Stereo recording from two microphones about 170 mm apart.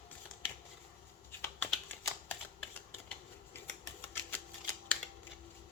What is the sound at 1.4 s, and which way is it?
Typing, 10° left (ahead or behind).